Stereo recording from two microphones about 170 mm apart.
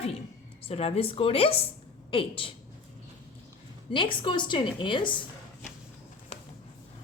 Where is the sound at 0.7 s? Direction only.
35° left (ahead or behind).